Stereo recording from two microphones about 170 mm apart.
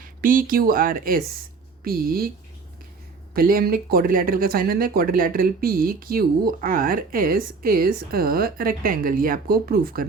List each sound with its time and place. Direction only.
0.0 s speech: 55° right (ahead or behind)
3.3 s speech: 60° right (ahead or behind)